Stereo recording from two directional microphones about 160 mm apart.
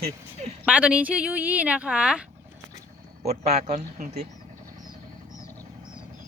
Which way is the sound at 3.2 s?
45° right (ahead or behind).